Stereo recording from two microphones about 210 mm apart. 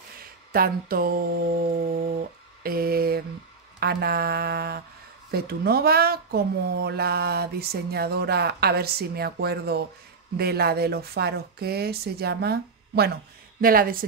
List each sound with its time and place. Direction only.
0.5 s speech: 45° right (ahead or behind)